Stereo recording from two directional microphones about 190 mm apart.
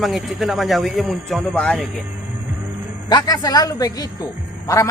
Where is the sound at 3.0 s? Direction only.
20° left (ahead or behind).